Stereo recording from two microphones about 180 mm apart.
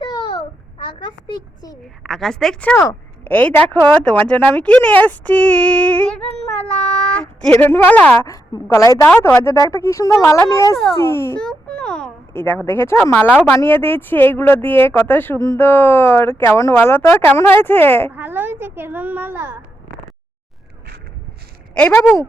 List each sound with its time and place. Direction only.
0.0 s babbling: 25° left (ahead or behind)
0.9 s a child's voice: 25° left (ahead or behind)
2.0 s speech: centre (ahead or behind)
11.4 s speech: 5° left (ahead or behind)
18.1 s a woman's voice: 10° right (ahead or behind)
21.8 s speech: 10° left (ahead or behind)